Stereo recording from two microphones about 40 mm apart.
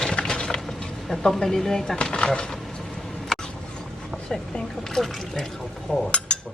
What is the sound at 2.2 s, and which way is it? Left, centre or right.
Speech, left.